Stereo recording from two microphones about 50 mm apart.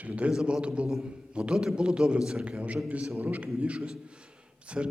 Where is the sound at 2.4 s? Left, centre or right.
Right.